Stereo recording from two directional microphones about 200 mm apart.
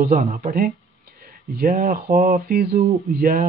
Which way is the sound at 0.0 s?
45° right (ahead or behind).